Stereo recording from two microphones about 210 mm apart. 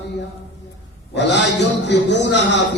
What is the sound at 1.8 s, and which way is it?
Speech, 55° left (ahead or behind).